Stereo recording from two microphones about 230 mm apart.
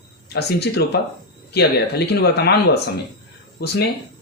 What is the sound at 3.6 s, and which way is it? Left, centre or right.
Speech, left.